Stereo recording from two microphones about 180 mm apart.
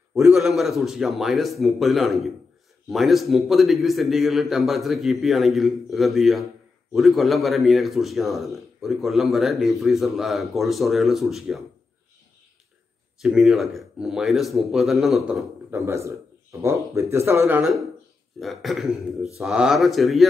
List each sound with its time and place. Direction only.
0.4 s a man's voice: centre (ahead or behind)
13.2 s a man's voice: centre (ahead or behind)
15.7 s speech: 15° right (ahead or behind)
18.4 s a man's voice: centre (ahead or behind)